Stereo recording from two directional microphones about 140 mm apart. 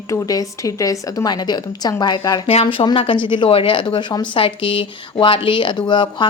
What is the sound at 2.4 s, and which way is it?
A woman's voice, 40° left (ahead or behind).